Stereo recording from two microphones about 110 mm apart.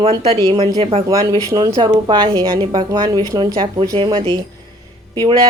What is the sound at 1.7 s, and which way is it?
Speech, 40° right (ahead or behind).